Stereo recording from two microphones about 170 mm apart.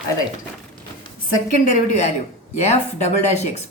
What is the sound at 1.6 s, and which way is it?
Speech, 50° left (ahead or behind).